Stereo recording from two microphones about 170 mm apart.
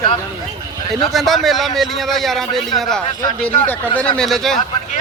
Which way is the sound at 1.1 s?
Centre (ahead or behind).